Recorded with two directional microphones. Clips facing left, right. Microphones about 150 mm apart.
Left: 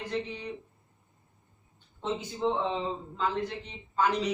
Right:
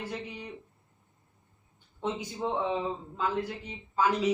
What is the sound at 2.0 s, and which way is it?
A woman's voice, 10° right (ahead or behind).